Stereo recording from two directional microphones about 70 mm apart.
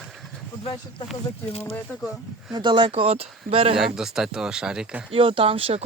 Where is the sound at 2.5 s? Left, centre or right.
Right.